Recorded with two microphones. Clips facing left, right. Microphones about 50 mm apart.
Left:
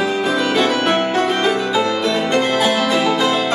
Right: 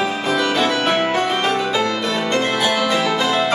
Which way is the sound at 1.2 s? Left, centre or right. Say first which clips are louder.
Left 2 dB; centre.